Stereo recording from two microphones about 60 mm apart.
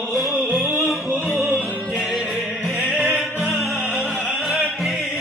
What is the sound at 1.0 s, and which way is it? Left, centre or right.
Music, right.